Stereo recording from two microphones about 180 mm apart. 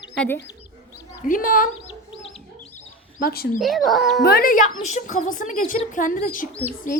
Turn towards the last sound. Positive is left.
turn(degrees=50)  # may be behind; listen again after turning